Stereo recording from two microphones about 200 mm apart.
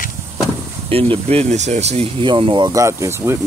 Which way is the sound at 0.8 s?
30° right (ahead or behind).